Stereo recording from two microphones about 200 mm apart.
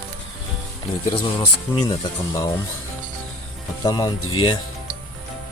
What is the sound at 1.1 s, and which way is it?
Speech, 20° left (ahead or behind).